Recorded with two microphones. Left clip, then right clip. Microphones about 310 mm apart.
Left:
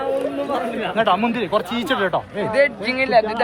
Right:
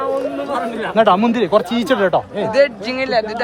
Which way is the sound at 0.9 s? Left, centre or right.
Right.